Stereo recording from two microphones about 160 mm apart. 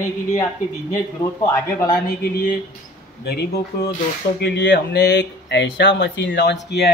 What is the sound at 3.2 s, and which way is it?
Speech, 90° left.